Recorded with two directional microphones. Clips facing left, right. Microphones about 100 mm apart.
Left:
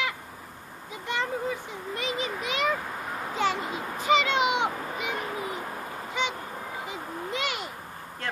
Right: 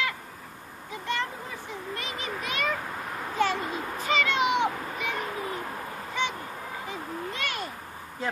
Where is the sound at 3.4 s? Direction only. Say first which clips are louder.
Right 1 dB; 20° left (ahead or behind).